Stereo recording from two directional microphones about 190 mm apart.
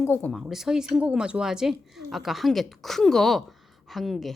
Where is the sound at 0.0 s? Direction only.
10° left (ahead or behind).